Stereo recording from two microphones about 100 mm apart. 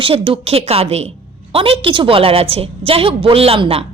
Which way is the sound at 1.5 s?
70° right (ahead or behind).